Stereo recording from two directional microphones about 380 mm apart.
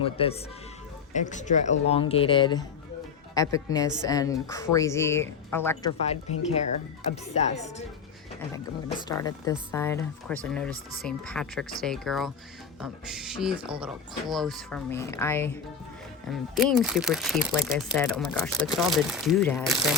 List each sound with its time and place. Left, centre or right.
0.0 s a woman's voice: centre
7.3 s a woman's voice: centre
9.0 s speech: centre